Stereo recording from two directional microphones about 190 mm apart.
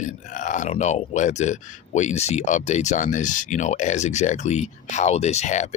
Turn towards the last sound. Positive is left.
turn(degrees=35)  # may be behind; listen again after turning